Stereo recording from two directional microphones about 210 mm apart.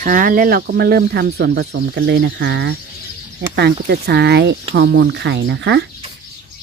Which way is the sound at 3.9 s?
50° right (ahead or behind).